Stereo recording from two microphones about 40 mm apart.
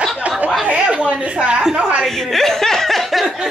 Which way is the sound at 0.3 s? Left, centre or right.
Right.